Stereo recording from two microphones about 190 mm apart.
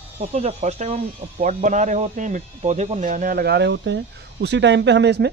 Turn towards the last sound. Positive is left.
turn(degrees=-65)  # may be behind; listen again after turning